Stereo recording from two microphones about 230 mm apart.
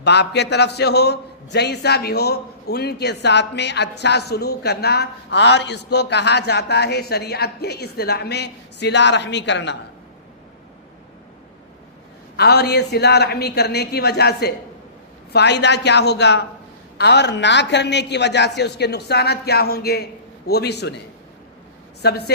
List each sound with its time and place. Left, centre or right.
0.0 s a man's voice: left
12.4 s a man's voice: left
22.0 s a man's voice: left